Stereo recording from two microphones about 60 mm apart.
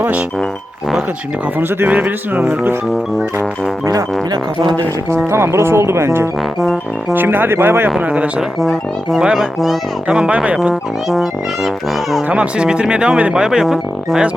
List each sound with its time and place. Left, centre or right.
1.5 s speech: right
5.2 s speech: right
7.1 s speech: right
8.0 s speech: right
9.1 s speech: centre
10.1 s speech: centre
11.1 s speech: centre
12.3 s speech: centre